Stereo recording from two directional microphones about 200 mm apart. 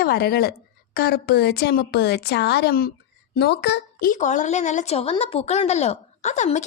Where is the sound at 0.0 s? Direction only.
50° left (ahead or behind).